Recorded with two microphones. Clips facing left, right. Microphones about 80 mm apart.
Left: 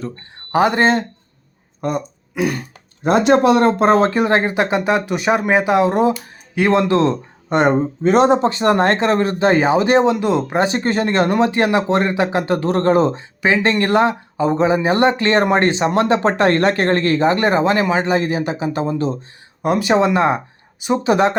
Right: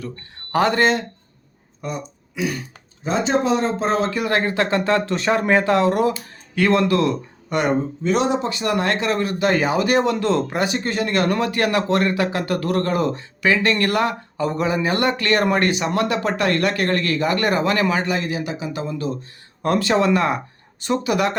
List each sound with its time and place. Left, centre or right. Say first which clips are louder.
0.5 s speech: left 3 dB; centre
1.8 s speech: left 7 dB; left
4.1 s speech: left 5 dB; left
10.6 s speech: left 5 dB; left
19.6 s speech: left 3 dB; centre
20.7 s speech: left 3 dB; centre
21.0 s speech: left 7 dB; left